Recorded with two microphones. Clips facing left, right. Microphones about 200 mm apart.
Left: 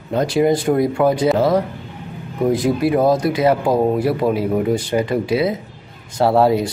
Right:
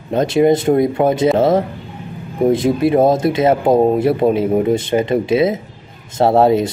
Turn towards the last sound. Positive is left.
turn(degrees=-20)  # may be behind; listen again after turning